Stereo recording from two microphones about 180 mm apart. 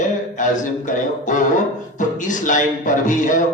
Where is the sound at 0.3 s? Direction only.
45° left (ahead or behind).